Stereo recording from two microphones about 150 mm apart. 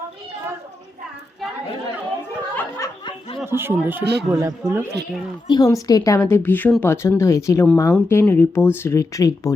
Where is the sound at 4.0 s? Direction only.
90° right.